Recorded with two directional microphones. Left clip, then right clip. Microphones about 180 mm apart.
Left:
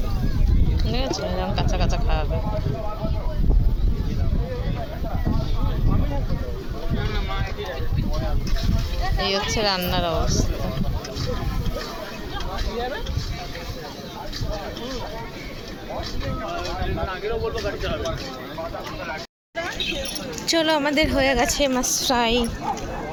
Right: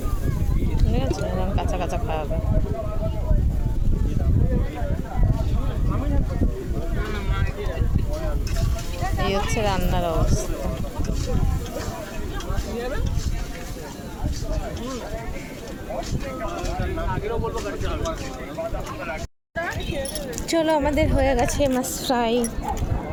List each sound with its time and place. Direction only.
1.5 s a woman's voice: 5° right (ahead or behind)
9.3 s a woman's voice: centre (ahead or behind)
17.1 s speech: 45° right (ahead or behind)
20.5 s a woman's voice: centre (ahead or behind)